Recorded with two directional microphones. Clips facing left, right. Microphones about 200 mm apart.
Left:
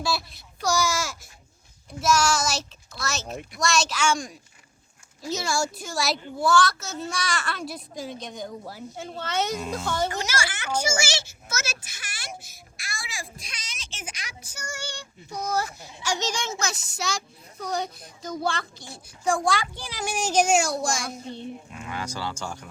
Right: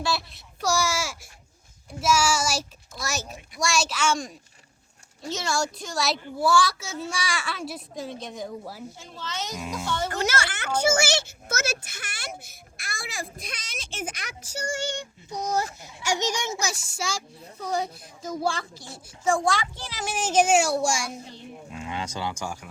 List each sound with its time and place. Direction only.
0.0 s a woman's voice: centre (ahead or behind)
6.3 s a woman's voice: 10° right (ahead or behind)
9.0 s a child's voice: 60° left (ahead or behind)
10.1 s a child's voice: 60° right (ahead or behind)
14.5 s child singing: 30° right (ahead or behind)
16.0 s a woman's voice: 20° right (ahead or behind)
21.8 s child singing: 25° right (ahead or behind)